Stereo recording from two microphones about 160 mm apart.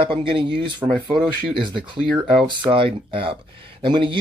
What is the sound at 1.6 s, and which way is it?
Speech, 30° right (ahead or behind).